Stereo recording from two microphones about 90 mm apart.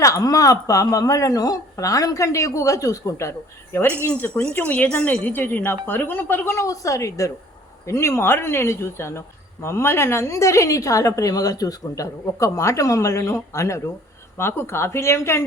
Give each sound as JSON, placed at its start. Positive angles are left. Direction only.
{"t": 0.0, "sound": "speech", "side_deg": 40}
{"t": 4.0, "sound": "speech", "side_deg": 20}